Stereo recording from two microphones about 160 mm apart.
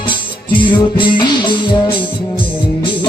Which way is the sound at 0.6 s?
30° left (ahead or behind).